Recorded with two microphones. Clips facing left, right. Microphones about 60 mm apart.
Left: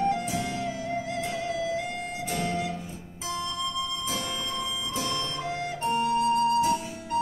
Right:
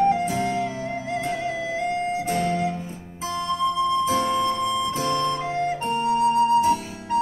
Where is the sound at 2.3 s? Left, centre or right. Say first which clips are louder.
Right 4 dB; right.